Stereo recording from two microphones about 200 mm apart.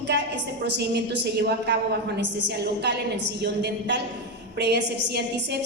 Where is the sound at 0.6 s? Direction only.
55° right (ahead or behind).